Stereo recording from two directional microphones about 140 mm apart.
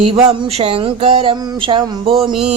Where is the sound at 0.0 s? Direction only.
45° right (ahead or behind).